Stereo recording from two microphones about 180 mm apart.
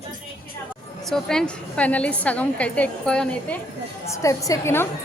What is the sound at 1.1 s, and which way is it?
A woman's voice, 5° left (ahead or behind).